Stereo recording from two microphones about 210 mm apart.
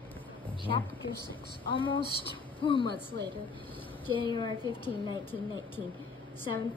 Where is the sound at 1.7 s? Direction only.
25° left (ahead or behind).